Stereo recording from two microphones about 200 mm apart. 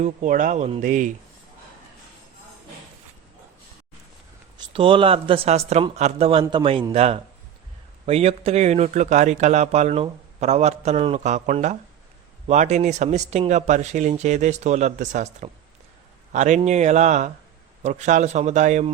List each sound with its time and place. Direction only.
0.0 s speech: 40° right (ahead or behind)
4.5 s speech: 25° right (ahead or behind)